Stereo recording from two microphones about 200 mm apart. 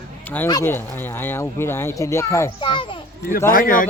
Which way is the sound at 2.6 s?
25° left (ahead or behind).